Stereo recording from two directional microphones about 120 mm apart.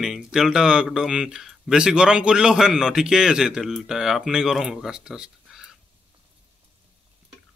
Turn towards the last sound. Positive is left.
turn(degrees=-5)  # may be behind; listen again after turning